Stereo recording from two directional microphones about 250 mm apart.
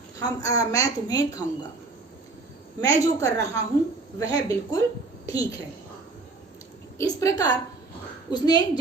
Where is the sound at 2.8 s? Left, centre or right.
Centre.